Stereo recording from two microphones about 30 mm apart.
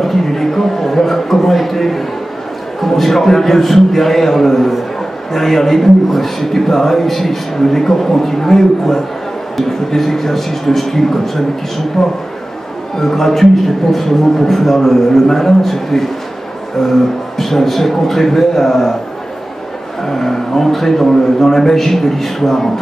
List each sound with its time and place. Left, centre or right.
0.0 s a sound: centre
2.8 s a man's voice: centre
17.4 s a man's voice: centre
20.1 s a man's voice: centre